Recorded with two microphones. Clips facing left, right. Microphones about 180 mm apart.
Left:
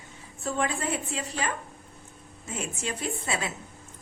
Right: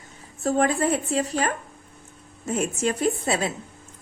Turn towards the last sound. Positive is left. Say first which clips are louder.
# right 8 dB
turn(degrees=-35)  # may be behind; listen again after turning